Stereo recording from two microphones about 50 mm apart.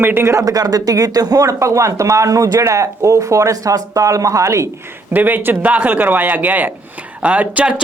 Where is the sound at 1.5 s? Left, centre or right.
Right.